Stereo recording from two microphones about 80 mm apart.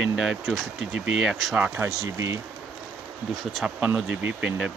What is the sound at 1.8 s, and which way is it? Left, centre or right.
Speech, right.